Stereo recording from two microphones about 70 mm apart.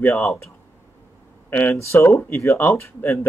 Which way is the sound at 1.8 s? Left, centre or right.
Left.